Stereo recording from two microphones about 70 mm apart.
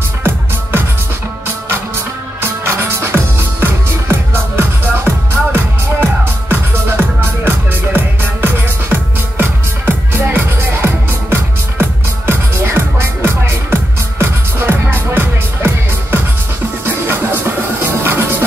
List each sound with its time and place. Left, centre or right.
0.2 s music: right
2.4 s music: right